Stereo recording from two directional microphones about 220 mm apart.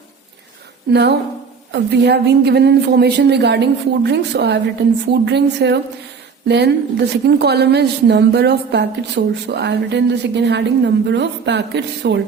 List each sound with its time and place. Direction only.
0.9 s a woman's voice: 50° right (ahead or behind)